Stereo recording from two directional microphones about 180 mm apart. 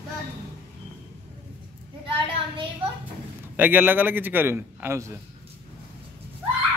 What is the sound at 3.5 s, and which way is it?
A man's voice, 10° right (ahead or behind).